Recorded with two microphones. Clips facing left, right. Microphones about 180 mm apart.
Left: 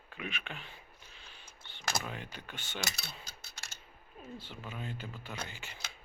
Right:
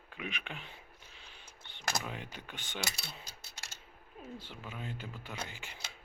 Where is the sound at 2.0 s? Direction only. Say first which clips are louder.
Even; 15° right (ahead or behind).